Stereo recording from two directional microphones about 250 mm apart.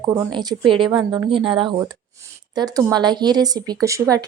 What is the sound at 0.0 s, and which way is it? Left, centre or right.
Speech, centre.